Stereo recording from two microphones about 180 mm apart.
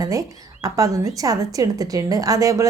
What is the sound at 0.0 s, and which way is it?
A woman's voice, 20° right (ahead or behind).